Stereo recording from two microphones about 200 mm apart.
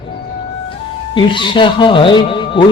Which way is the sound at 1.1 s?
25° left (ahead or behind).